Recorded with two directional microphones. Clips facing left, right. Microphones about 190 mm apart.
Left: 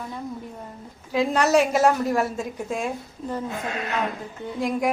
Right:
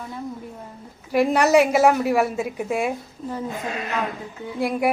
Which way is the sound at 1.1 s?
10° right (ahead or behind).